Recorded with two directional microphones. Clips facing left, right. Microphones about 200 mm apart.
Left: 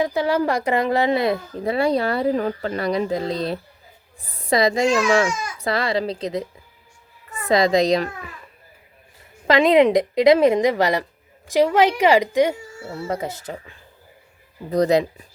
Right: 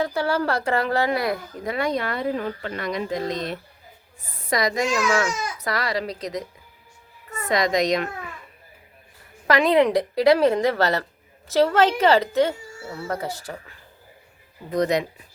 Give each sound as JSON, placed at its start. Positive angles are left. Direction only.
{"t": 0.0, "sound": "a woman's voice", "side_deg": 15}
{"t": 5.3, "sound": "speech", "side_deg": -35}
{"t": 5.6, "sound": "a woman's voice", "side_deg": 25}
{"t": 9.5, "sound": "a woman's voice", "side_deg": 20}
{"t": 14.7, "sound": "speech", "side_deg": 30}